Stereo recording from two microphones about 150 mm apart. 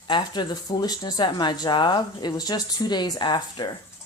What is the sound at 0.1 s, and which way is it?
Speech, 30° left (ahead or behind).